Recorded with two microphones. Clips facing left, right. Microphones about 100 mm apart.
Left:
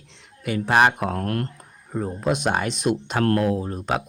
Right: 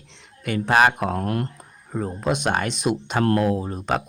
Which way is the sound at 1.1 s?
15° right (ahead or behind).